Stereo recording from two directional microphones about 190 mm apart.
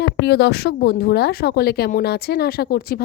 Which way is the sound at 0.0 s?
60° left (ahead or behind).